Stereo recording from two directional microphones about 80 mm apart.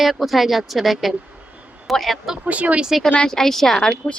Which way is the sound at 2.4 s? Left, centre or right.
Centre.